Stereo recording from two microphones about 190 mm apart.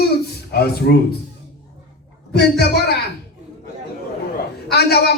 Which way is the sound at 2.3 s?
60° left (ahead or behind).